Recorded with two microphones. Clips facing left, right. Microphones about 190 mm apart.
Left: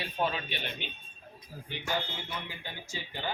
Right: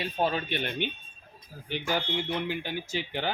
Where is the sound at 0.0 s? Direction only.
35° right (ahead or behind).